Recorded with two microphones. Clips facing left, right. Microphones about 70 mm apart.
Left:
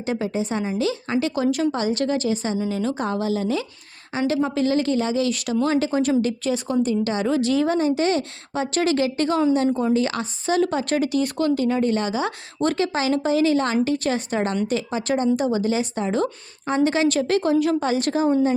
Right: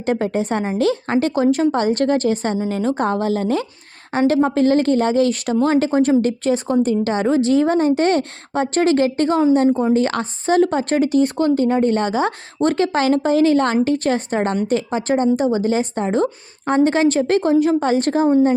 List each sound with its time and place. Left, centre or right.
0.0 s speech: right
9.6 s a woman's voice: right
9.9 s speech: right